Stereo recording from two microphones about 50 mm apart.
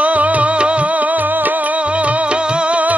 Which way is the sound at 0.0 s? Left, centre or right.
Right.